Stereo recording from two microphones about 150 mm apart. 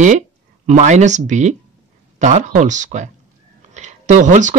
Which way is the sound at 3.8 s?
50° right (ahead or behind).